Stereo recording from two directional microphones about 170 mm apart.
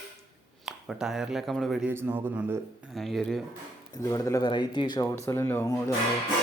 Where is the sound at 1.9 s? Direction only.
15° right (ahead or behind).